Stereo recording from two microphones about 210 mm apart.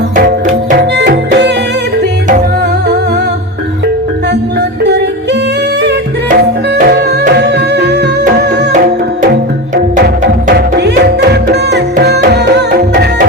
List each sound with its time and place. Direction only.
0.7 s music: 50° right (ahead or behind)
4.8 s yodeling: 55° right (ahead or behind)
5.8 s music: 50° right (ahead or behind)
8.2 s music: 40° right (ahead or behind)
10.8 s music: 55° right (ahead or behind)